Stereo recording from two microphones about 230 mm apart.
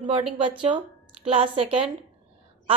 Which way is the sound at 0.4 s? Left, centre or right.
Right.